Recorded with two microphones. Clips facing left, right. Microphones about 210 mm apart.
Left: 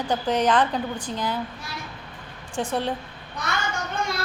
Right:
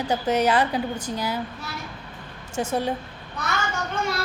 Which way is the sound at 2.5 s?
45° right (ahead or behind).